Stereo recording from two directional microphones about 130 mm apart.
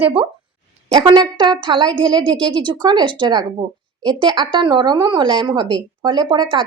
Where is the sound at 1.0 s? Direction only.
35° right (ahead or behind).